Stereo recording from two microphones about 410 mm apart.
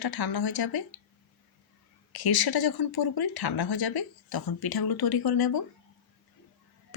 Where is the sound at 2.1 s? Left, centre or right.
Left.